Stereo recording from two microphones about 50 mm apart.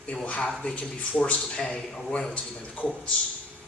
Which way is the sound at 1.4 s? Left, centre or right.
Centre.